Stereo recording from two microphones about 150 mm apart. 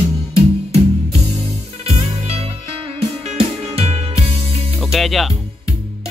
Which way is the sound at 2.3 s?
40° right (ahead or behind).